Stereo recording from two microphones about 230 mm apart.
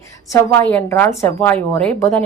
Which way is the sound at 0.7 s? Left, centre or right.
Centre.